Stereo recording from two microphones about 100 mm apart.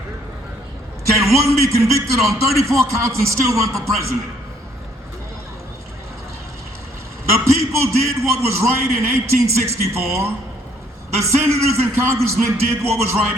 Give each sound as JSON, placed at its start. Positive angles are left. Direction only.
{"t": 1.2, "sound": "a man's voice", "side_deg": -30}
{"t": 7.3, "sound": "a man's voice", "side_deg": -25}
{"t": 11.4, "sound": "a man's voice", "side_deg": -25}